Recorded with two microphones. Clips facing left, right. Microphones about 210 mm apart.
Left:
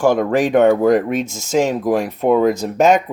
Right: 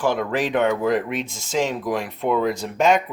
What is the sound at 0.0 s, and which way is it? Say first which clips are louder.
Speech: left 7 dB; 45° left (ahead or behind).